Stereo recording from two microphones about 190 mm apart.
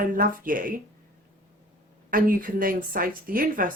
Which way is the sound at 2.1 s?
50° right (ahead or behind).